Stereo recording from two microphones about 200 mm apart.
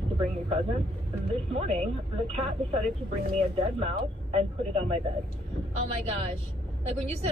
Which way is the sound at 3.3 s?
30° right (ahead or behind).